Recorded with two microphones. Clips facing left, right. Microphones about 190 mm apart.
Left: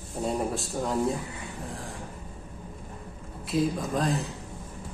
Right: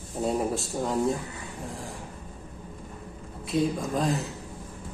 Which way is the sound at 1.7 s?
Centre (ahead or behind).